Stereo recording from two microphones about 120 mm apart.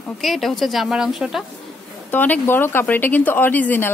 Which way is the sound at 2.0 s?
15° left (ahead or behind).